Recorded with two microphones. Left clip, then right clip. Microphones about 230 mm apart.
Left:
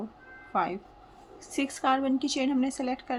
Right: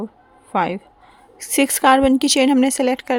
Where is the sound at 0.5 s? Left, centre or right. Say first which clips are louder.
Right 9 dB; right.